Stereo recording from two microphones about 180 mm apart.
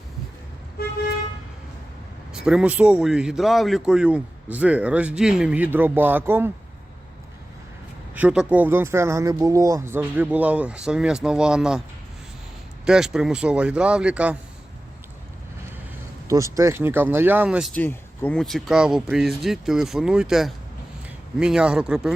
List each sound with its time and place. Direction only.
2.3 s a man's voice: 5° right (ahead or behind)
8.1 s a man's voice: 5° right (ahead or behind)
12.8 s speech: 5° right (ahead or behind)
16.3 s a man's voice: 15° right (ahead or behind)
17.7 s speech: 10° left (ahead or behind)